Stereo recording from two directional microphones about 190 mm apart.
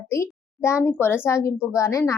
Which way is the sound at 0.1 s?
15° left (ahead or behind).